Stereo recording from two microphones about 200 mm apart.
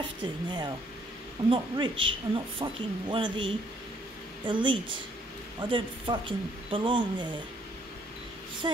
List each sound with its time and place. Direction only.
0.2 s speech: 20° right (ahead or behind)
8.6 s speech: 25° right (ahead or behind)